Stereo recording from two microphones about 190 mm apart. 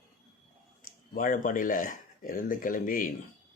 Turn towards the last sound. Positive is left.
turn(degrees=45)  # may be behind; listen again after turning